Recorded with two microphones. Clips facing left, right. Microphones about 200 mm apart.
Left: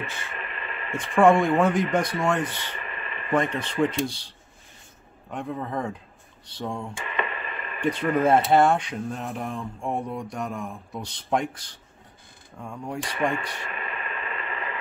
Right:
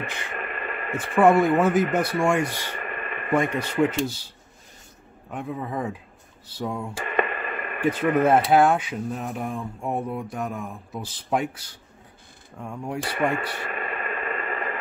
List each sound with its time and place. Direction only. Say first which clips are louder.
0.0 s speech: right 2 dB; 15° right (ahead or behind)
0.4 s a sound: right 6 dB; 50° right (ahead or behind)
0.9 s speech: even; 5° right (ahead or behind)
2.8 s a sound: right 4 dB; 50° right (ahead or behind)
3.3 s speech: right 2 dB; 10° right (ahead or behind)
5.3 s speech: even; 5° right (ahead or behind)
7.1 s radio: right 7 dB; 50° right (ahead or behind)
7.8 s speech: right 2 dB; 5° right (ahead or behind)
13.7 s radio: right 4 dB; 45° right (ahead or behind)